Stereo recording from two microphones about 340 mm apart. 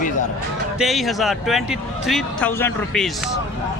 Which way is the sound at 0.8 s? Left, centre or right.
Centre.